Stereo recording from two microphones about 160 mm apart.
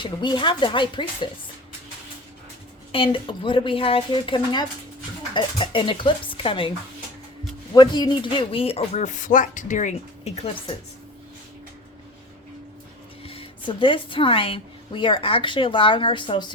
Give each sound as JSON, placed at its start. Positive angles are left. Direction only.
{"t": 0.0, "sound": "speech", "side_deg": 30}
{"t": 2.9, "sound": "speech", "side_deg": 35}
{"t": 13.2, "sound": "a woman's voice", "side_deg": 35}